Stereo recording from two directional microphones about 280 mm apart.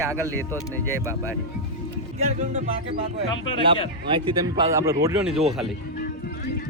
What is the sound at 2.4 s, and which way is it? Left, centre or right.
Speech, right.